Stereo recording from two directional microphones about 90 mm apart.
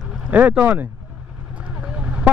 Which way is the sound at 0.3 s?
15° right (ahead or behind).